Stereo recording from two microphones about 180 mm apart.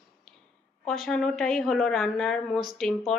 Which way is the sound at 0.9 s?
Centre (ahead or behind).